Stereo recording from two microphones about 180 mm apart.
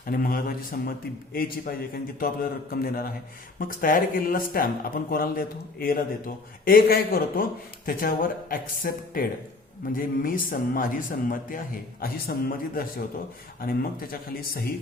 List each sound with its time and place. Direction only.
0.0 s speech: 50° left (ahead or behind)